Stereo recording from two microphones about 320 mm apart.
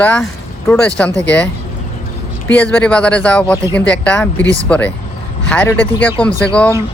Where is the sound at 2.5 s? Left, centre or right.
Centre.